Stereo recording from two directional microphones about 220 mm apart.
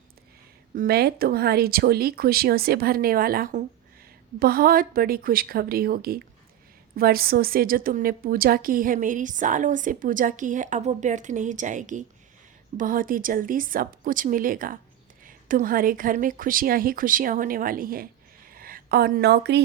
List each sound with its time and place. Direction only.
0.7 s a woman's voice: 45° right (ahead or behind)